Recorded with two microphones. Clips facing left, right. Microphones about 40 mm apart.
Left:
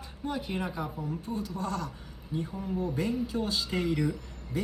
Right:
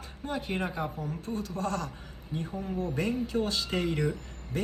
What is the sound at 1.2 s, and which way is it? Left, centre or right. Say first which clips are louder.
Speech: right 3 dB; right.